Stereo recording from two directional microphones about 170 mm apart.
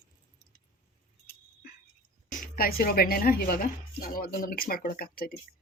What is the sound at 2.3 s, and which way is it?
A woman's voice, 55° left (ahead or behind).